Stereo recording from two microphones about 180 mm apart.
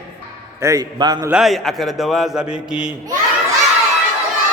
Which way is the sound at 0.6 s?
20° right (ahead or behind).